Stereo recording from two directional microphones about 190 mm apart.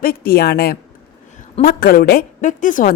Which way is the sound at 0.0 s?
50° left (ahead or behind).